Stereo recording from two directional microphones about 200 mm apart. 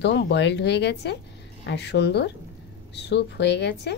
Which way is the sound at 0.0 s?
60° left (ahead or behind).